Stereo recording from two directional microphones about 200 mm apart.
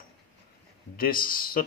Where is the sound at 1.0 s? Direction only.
45° left (ahead or behind).